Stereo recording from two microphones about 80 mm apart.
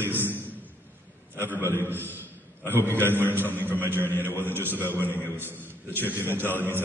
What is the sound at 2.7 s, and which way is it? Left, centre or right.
A man's voice, left.